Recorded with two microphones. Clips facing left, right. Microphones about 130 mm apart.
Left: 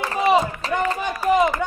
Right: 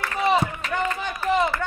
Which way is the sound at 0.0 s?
35° left (ahead or behind).